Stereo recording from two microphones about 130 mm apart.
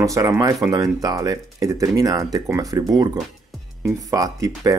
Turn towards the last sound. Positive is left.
turn(degrees=-30)  # may be behind; listen again after turning